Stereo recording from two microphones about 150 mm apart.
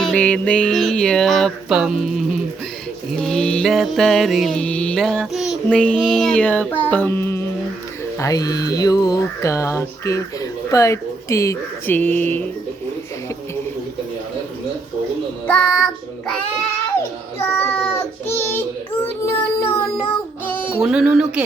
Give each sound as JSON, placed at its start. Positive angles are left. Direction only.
{"t": 0.0, "sound": "mantra", "side_deg": 10}
{"t": 8.2, "sound": "speech", "side_deg": 25}
{"t": 15.4, "sound": "child singing", "side_deg": 5}
{"t": 17.5, "sound": "child singing", "side_deg": 15}
{"t": 19.0, "sound": "speech", "side_deg": 20}
{"t": 20.8, "sound": "mantra", "side_deg": -5}